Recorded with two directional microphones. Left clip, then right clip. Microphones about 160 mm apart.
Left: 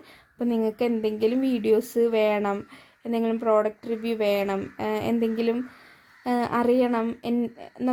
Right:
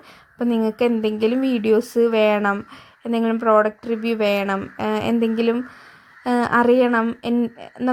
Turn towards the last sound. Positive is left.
turn(degrees=-10)  # may be behind; listen again after turning